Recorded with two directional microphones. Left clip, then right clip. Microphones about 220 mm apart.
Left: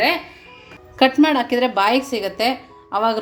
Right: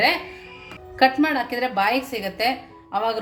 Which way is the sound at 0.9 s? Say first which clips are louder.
Left 3 dB; 25° left (ahead or behind).